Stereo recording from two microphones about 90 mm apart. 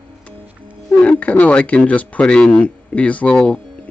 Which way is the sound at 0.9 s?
15° left (ahead or behind).